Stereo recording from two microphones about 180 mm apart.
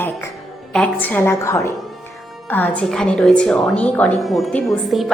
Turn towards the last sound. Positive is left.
turn(degrees=0)  # may be behind; listen again after turning